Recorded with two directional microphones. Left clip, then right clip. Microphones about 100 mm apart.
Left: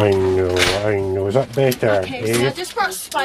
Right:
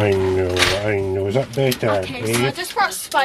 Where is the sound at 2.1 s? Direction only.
20° right (ahead or behind).